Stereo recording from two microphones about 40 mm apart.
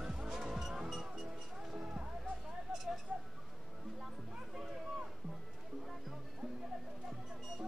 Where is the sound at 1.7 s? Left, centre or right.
Right.